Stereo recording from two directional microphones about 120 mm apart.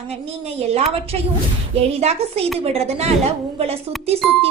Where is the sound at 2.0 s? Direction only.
60° right (ahead or behind).